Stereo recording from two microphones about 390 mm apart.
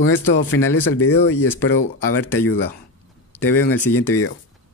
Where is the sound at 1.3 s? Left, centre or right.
Centre.